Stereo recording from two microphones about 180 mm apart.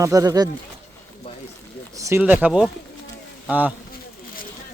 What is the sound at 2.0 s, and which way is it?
Speech, 15° right (ahead or behind).